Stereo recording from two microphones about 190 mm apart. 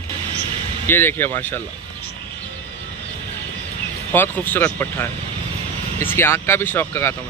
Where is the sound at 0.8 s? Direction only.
10° left (ahead or behind).